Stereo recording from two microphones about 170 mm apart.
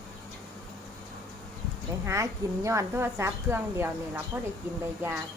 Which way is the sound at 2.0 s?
15° right (ahead or behind).